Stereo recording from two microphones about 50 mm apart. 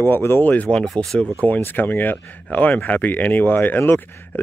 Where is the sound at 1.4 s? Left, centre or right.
Left.